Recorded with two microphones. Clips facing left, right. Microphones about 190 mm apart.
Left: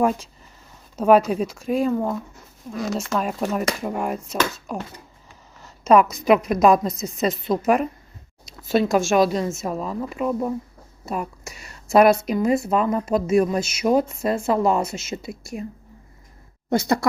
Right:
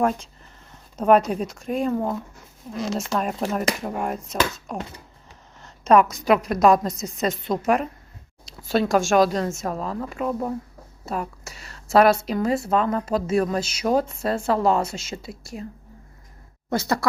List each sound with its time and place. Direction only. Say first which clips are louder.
0.9 s a woman's voice: left 2 dB; 5° left (ahead or behind)
16.6 s speech: left 3 dB; 15° left (ahead or behind)